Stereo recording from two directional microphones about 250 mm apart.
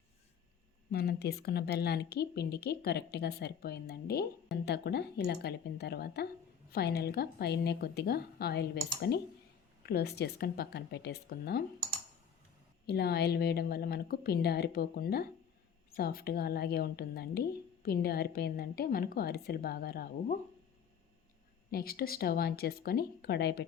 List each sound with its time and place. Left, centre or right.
0.9 s speech: left
12.9 s speech: left
21.7 s speech: left